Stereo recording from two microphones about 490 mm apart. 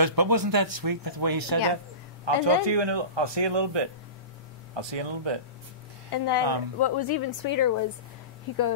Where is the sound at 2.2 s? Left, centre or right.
Right.